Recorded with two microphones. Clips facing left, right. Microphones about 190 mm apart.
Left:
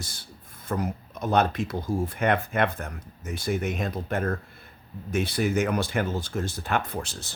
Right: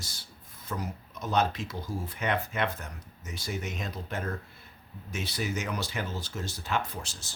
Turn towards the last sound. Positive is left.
turn(degrees=60)  # may be behind; listen again after turning